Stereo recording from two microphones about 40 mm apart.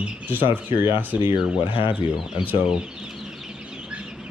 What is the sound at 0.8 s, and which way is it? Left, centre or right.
Speech, right.